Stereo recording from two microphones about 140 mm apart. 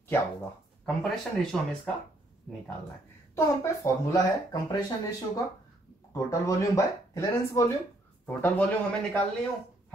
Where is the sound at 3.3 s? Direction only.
20° left (ahead or behind).